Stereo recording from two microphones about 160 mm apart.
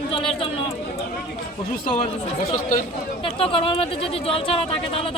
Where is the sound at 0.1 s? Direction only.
35° left (ahead or behind).